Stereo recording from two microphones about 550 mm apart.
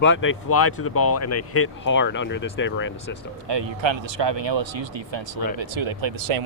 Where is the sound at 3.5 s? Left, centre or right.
Right.